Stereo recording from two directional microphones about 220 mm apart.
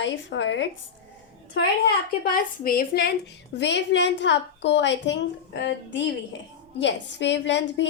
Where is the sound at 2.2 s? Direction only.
40° left (ahead or behind).